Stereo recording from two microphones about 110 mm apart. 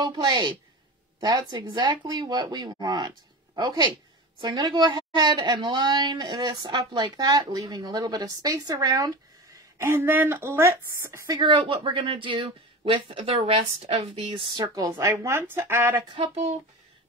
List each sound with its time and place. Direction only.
0.0 s a woman's voice: 40° right (ahead or behind)
9.8 s speech: 20° right (ahead or behind)
11.3 s speech: 50° right (ahead or behind)
14.5 s a woman's voice: 40° right (ahead or behind)
14.9 s speech: 25° right (ahead or behind)